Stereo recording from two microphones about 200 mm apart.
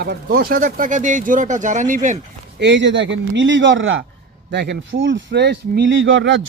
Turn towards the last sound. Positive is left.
turn(degrees=-70)  # may be behind; listen again after turning